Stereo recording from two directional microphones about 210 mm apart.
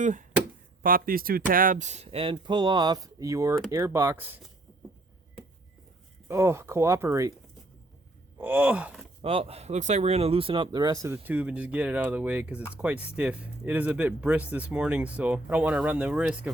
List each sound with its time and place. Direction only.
0.0 s speech: 35° right (ahead or behind); by 4.4 s 10° right (ahead or behind)
6.2 s speech: 10° right (ahead or behind)
8.4 s speech: 10° right (ahead or behind)
9.2 s speech: 30° right (ahead or behind); by 16.4 s 5° right (ahead or behind)